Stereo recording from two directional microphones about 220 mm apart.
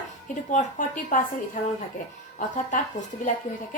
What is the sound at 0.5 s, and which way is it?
Speech, 35° left (ahead or behind).